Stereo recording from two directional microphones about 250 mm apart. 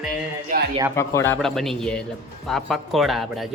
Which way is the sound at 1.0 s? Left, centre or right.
Centre.